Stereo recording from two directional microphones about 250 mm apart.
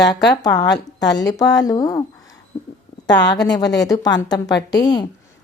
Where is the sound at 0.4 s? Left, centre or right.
Centre.